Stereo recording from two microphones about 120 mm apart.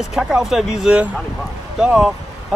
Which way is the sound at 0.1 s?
5° right (ahead or behind).